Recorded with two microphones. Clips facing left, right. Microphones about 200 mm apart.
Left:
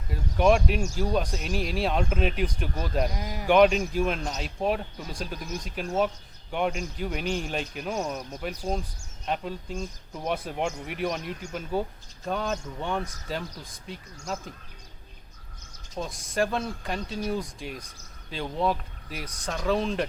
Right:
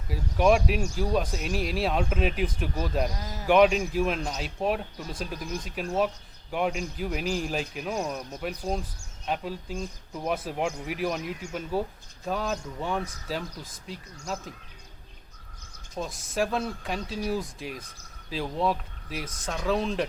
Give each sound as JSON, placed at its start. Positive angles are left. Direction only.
{"t": 0.1, "sound": "speech", "side_deg": 0}
{"t": 3.2, "sound": "speech", "side_deg": 15}
{"t": 3.4, "sound": "speech", "side_deg": 0}
{"t": 16.0, "sound": "speech", "side_deg": 0}